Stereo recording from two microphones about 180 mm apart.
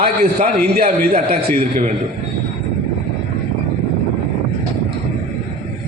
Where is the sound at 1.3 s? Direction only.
55° right (ahead or behind).